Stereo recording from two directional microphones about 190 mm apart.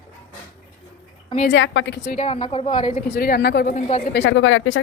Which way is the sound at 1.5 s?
85° left.